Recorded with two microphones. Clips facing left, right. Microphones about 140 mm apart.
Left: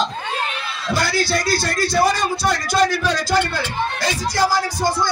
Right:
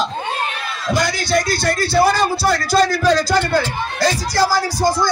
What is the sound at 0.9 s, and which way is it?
Speech, 15° right (ahead or behind).